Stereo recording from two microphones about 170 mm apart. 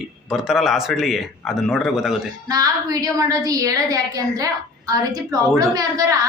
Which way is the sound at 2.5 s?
20° right (ahead or behind).